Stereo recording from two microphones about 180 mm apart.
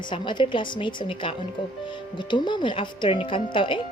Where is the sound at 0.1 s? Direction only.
25° left (ahead or behind).